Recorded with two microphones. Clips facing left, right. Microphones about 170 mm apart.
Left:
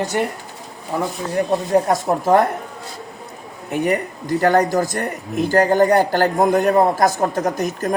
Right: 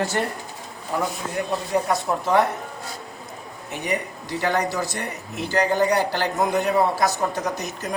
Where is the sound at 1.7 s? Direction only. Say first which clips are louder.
Left 4 dB; 45° left (ahead or behind).